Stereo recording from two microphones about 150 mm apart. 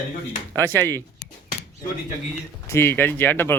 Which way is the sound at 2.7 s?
15° left (ahead or behind).